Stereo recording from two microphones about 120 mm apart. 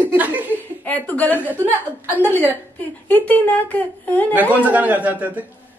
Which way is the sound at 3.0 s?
15° left (ahead or behind).